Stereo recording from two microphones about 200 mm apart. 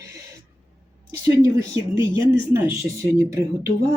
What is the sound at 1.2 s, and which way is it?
Speech, 15° right (ahead or behind).